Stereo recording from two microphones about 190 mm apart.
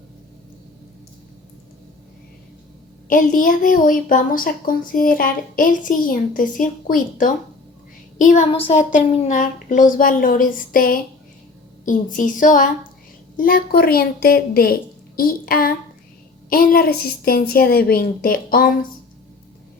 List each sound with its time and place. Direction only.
3.1 s a woman's voice: 45° left (ahead or behind)
8.4 s a woman's voice: 35° left (ahead or behind); by 18.7 s 50° left (ahead or behind)